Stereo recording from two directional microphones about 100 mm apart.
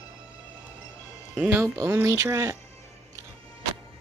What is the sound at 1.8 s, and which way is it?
Speech, 30° right (ahead or behind).